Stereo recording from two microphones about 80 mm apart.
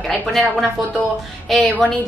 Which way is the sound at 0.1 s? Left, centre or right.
Centre.